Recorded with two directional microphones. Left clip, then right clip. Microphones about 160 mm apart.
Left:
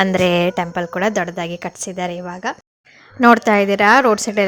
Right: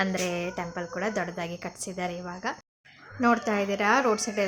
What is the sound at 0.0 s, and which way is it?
A woman's voice, 80° left.